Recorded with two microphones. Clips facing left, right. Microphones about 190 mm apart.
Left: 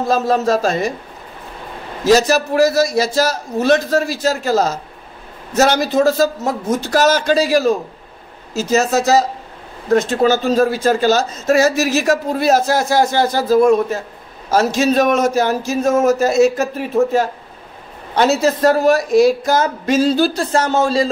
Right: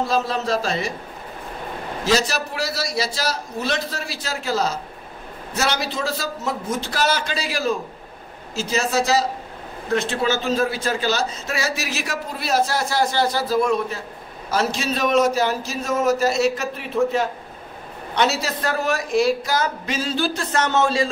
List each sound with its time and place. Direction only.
0.1 s a man's voice: 45° left (ahead or behind)
2.0 s a man's voice: 45° left (ahead or behind)